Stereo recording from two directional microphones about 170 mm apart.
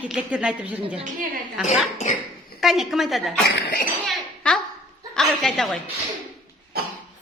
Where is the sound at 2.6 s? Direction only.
Centre (ahead or behind).